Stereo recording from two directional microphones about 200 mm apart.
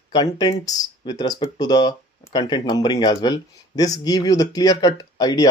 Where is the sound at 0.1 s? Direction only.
20° left (ahead or behind).